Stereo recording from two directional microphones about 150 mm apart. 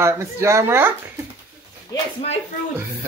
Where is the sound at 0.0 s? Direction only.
15° right (ahead or behind).